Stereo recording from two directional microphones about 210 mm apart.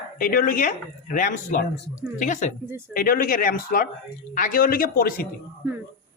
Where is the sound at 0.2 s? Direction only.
40° left (ahead or behind).